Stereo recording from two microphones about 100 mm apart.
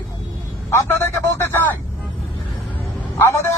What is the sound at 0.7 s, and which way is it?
Speech, 30° left (ahead or behind).